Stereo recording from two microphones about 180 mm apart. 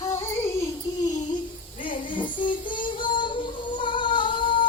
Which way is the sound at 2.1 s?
25° left (ahead or behind).